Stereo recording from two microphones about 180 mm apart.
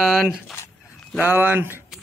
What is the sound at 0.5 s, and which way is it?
Dog, 15° left (ahead or behind).